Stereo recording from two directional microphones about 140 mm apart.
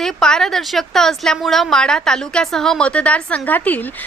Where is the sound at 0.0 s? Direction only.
5° left (ahead or behind).